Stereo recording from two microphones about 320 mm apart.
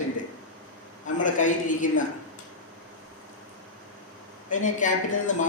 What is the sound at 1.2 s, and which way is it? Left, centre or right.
Speech, left.